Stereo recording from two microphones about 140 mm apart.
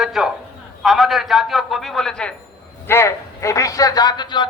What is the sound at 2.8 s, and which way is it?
A man's voice, 20° left (ahead or behind).